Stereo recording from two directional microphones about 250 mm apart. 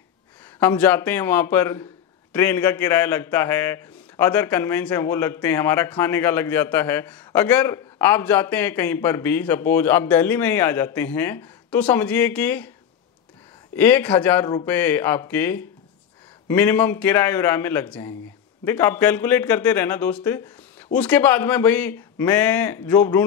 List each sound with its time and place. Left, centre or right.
0.6 s a man's voice: centre
13.7 s a man's voice: centre